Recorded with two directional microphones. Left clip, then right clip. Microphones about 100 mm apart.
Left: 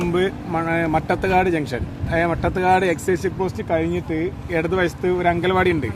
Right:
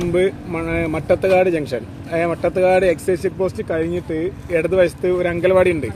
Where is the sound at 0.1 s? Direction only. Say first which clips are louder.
Right 3 dB; 35° left (ahead or behind).